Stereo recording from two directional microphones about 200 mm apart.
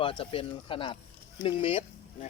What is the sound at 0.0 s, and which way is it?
A man's voice, 25° left (ahead or behind).